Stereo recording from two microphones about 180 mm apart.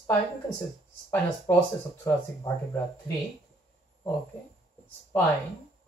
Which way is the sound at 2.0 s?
15° left (ahead or behind).